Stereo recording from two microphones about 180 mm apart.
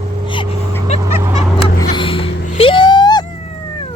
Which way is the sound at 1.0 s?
15° right (ahead or behind).